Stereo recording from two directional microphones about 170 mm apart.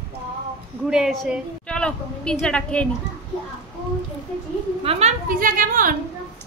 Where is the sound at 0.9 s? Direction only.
Centre (ahead or behind).